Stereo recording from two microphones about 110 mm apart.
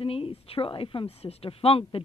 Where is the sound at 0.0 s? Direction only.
60° left (ahead or behind).